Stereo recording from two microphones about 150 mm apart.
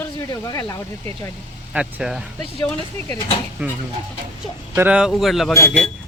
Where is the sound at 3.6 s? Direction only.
10° right (ahead or behind).